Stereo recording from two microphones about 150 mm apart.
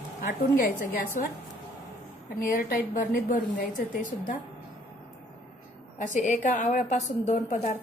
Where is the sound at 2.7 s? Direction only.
60° left (ahead or behind).